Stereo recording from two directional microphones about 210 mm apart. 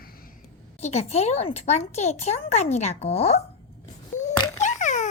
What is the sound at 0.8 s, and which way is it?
Speech, 30° left (ahead or behind).